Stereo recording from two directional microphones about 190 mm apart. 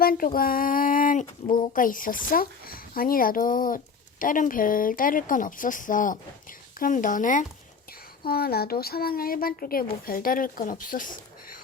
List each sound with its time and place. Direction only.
0.0 s speech: 50° left (ahead or behind)
8.2 s speech: 55° left (ahead or behind)